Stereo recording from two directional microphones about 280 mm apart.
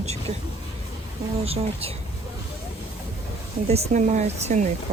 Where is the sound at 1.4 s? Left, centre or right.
Right.